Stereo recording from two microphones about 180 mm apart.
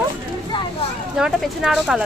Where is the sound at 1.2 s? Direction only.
Centre (ahead or behind).